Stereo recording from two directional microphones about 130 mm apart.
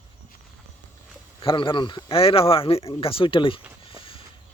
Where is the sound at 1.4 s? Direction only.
40° left (ahead or behind).